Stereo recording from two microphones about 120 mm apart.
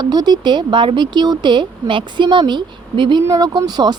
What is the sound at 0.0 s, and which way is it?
Speech, 35° right (ahead or behind).